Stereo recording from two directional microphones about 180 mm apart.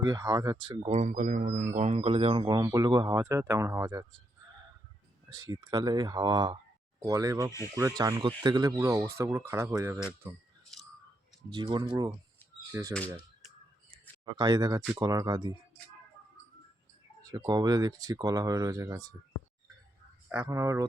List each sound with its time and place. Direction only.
0.0 s speech: 20° right (ahead or behind)
0.9 s speech: 40° right (ahead or behind); by 4.0 s 20° right (ahead or behind)
5.3 s speech: 20° right (ahead or behind)
11.5 s speech: 25° right (ahead or behind)
14.3 s speech: 25° right (ahead or behind)
17.2 s speech: 20° right (ahead or behind)
20.4 s speech: 15° right (ahead or behind)